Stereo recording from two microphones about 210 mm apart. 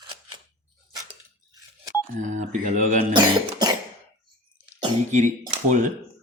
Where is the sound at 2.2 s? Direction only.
35° right (ahead or behind).